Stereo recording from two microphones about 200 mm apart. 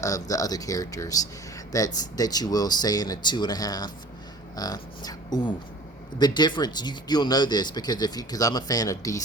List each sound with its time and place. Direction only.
0.0 s speech: 15° left (ahead or behind)